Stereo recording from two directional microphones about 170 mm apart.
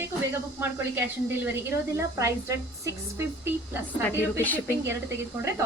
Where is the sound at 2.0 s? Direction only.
15° right (ahead or behind).